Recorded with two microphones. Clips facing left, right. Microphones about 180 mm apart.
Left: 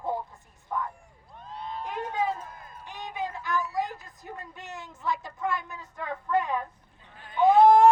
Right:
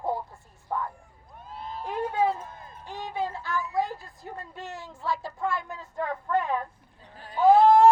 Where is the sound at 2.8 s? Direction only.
20° left (ahead or behind).